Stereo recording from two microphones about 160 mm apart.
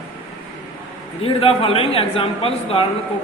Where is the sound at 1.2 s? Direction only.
35° left (ahead or behind).